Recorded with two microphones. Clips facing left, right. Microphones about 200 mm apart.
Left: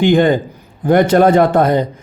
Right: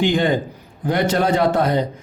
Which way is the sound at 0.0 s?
55° left (ahead or behind).